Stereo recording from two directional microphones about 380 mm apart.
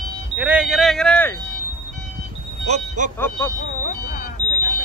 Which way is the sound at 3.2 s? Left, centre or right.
Centre.